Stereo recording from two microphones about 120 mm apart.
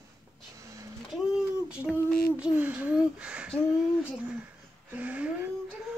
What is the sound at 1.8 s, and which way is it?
Female singing, 15° left (ahead or behind).